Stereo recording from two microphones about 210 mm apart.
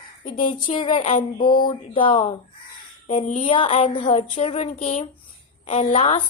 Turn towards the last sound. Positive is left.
turn(degrees=25)  # may be behind; listen again after turning